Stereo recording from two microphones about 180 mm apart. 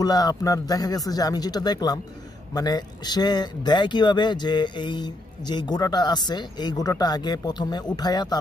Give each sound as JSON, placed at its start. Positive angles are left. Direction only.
{"t": 0.0, "sound": "speech", "side_deg": 20}